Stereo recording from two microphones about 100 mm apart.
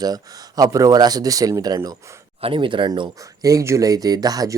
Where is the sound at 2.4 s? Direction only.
60° right (ahead or behind).